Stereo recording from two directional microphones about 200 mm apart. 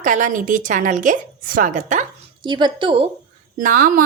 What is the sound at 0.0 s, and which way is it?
A woman's voice, 40° right (ahead or behind).